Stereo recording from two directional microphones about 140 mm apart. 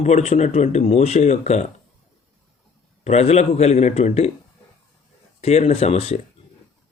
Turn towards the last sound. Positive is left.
turn(degrees=50)  # may be behind; listen again after turning